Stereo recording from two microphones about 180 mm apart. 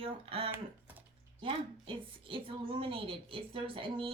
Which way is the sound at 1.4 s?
30° right (ahead or behind).